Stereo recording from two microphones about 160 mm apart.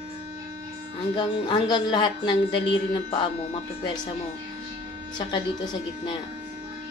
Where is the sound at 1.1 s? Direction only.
25° left (ahead or behind).